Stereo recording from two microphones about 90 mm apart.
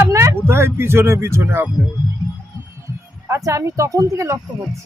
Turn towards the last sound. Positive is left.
turn(degrees=-35)  # may be behind; listen again after turning